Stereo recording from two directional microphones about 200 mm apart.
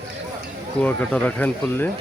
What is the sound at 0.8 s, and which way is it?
Speech, 5° left (ahead or behind).